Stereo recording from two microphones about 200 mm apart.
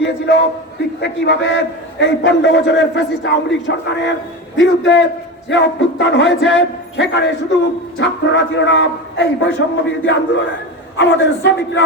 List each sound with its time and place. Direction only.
0.3 s a man's voice: 60° left (ahead or behind)